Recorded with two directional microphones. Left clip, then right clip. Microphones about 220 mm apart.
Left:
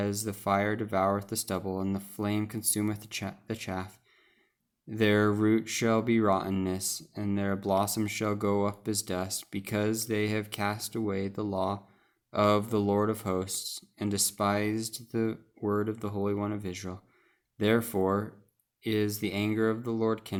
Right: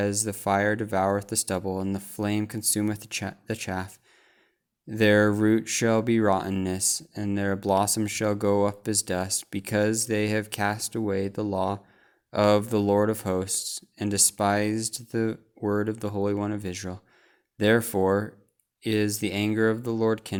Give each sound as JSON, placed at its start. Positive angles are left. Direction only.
{"t": 0.0, "sound": "speech", "side_deg": -25}